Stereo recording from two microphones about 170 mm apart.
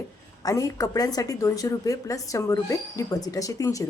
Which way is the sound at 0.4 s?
20° left (ahead or behind).